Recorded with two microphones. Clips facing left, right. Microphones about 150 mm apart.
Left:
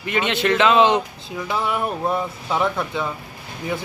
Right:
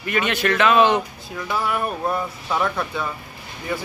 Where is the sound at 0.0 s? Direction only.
20° left (ahead or behind).